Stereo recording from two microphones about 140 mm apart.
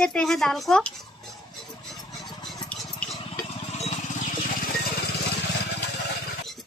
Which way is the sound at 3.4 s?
50° left (ahead or behind).